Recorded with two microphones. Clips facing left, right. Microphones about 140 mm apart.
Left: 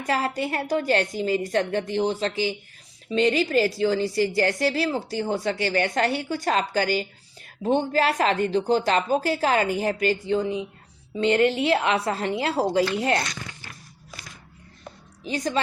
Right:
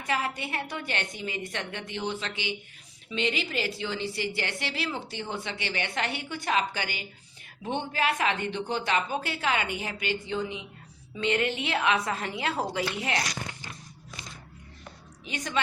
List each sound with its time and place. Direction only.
0.0 s a woman's voice: 40° left (ahead or behind)
15.2 s a woman's voice: 35° left (ahead or behind)